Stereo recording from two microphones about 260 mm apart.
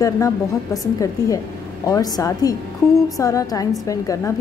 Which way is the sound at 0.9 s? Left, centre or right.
Centre.